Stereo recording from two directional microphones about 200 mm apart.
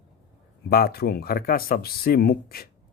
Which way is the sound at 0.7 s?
50° left (ahead or behind).